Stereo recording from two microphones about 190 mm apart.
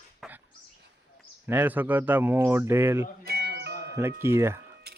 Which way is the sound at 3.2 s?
55° right (ahead or behind).